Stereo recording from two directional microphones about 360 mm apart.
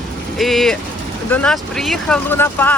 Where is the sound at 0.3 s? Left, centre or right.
Centre.